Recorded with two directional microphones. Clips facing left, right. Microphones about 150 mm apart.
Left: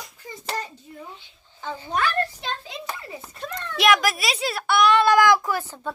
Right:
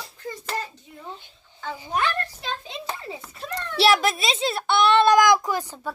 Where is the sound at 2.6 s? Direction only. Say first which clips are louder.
Right 1 dB; 25° right (ahead or behind).